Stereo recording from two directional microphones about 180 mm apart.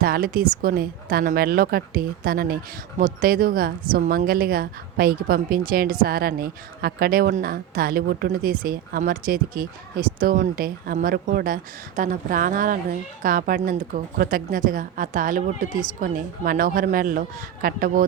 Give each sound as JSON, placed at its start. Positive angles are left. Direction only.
{"t": 0.0, "sound": "a woman's voice", "side_deg": -55}